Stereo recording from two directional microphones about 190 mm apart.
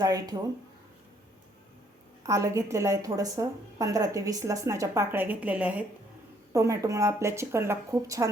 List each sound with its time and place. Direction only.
0.0 s speech: 20° right (ahead or behind)
2.2 s a woman's voice: 15° right (ahead or behind)